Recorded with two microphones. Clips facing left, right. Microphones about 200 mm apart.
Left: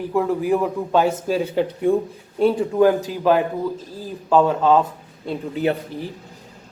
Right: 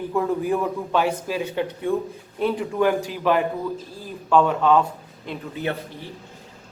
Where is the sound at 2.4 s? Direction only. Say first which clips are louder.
Left 6 dB; 30° left (ahead or behind).